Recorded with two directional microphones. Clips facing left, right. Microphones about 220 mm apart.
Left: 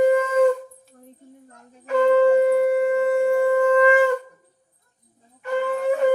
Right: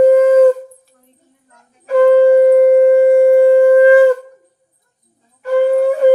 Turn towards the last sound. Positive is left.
turn(degrees=-40)  # may be behind; listen again after turning